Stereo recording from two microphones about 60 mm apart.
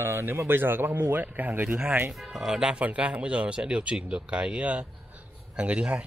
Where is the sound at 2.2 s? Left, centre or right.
Centre.